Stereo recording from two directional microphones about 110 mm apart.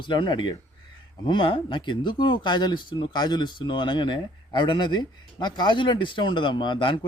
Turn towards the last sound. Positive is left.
turn(degrees=50)  # may be behind; listen again after turning